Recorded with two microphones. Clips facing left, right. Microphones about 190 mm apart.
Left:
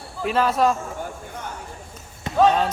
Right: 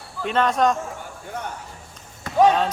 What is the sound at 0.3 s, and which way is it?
Speech, 5° left (ahead or behind).